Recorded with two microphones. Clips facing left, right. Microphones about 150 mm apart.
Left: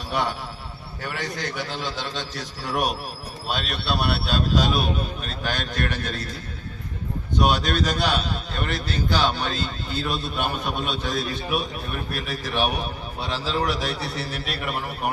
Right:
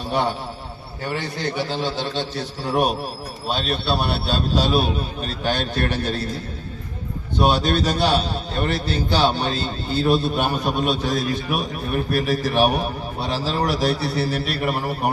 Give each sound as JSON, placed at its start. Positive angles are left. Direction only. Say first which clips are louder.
{"t": 0.1, "sound": "a man's voice", "louder": "right 3 dB", "side_deg": -30}
{"t": 7.3, "sound": "a man's voice", "louder": "right 3 dB", "side_deg": -30}